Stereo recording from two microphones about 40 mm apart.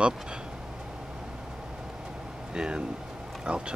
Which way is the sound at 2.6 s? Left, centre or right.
Right.